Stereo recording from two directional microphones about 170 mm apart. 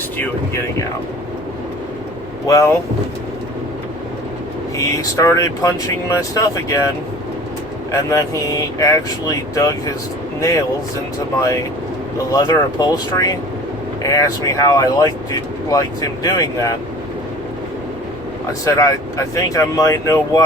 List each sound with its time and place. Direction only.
2.5 s speech: 20° left (ahead or behind)
4.8 s speech: 20° left (ahead or behind)
7.9 s speech: 20° left (ahead or behind)
12.3 s speech: 20° left (ahead or behind)
18.6 s speech: 20° left (ahead or behind)